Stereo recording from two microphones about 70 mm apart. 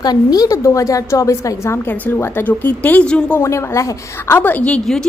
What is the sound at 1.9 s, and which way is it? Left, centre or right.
Speech, left.